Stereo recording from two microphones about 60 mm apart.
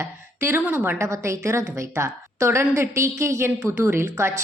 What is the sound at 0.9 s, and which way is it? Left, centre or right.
A woman's voice, right.